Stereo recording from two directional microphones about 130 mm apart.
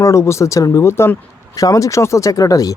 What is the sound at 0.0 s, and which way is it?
Speech, 20° left (ahead or behind).